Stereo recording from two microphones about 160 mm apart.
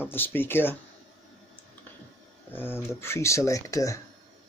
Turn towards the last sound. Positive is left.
turn(degrees=20)  # may be behind; listen again after turning